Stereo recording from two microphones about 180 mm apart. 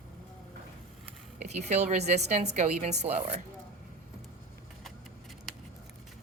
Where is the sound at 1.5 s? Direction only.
40° right (ahead or behind).